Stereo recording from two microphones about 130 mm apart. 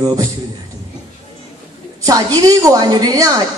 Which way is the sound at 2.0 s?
30° right (ahead or behind).